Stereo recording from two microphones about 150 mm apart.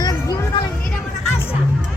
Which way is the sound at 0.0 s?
25° left (ahead or behind).